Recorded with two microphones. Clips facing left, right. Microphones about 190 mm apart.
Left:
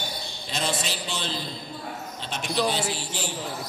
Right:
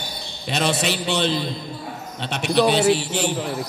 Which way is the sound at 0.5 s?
70° right (ahead or behind).